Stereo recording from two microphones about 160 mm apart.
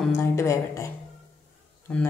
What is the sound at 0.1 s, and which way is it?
Speech, 15° left (ahead or behind).